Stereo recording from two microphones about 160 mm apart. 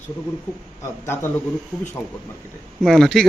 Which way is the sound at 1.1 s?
15° left (ahead or behind).